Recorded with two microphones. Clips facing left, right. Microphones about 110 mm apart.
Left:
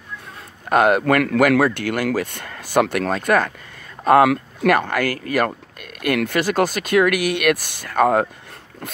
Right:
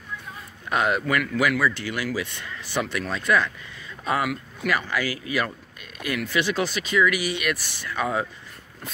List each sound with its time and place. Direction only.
0.7 s speech: 50° left (ahead or behind)
1.2 s speech: 80° left; by 3.5 s 50° left (ahead or behind)
4.0 s speech: 70° left (ahead or behind)
6.4 s speech: 50° left (ahead or behind)